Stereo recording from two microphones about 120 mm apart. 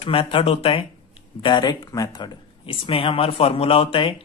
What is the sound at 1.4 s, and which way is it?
A man's voice, 40° left (ahead or behind).